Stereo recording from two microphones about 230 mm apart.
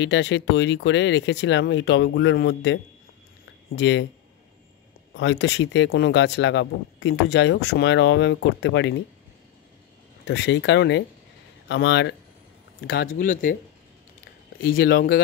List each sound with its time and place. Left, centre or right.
0.0 s speech: left
5.1 s speech: left
10.2 s speech: left
14.6 s speech: left